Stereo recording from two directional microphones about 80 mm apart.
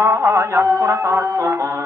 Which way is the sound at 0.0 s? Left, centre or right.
Right.